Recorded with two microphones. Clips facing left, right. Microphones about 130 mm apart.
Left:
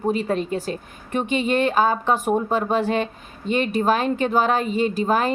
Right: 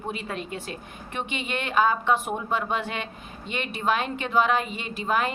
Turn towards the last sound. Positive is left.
turn(degrees=35)  # may be behind; listen again after turning